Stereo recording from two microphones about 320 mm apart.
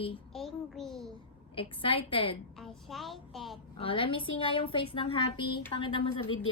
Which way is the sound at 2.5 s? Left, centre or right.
Centre.